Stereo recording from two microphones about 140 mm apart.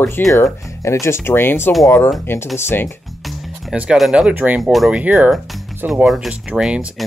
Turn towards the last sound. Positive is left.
turn(degrees=-5)  # may be behind; listen again after turning